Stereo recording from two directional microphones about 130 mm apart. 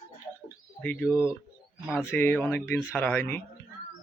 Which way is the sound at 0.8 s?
10° left (ahead or behind).